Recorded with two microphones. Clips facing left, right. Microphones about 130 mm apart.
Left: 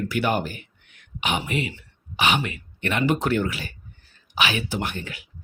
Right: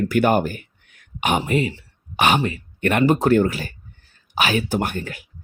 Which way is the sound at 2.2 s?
50° right (ahead or behind).